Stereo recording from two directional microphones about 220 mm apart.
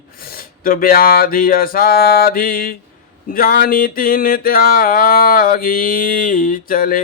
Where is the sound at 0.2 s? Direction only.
40° left (ahead or behind).